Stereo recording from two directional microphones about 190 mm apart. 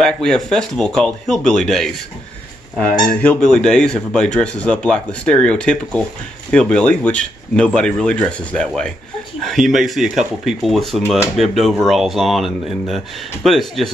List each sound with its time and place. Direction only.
0.0 s speech: 5° left (ahead or behind)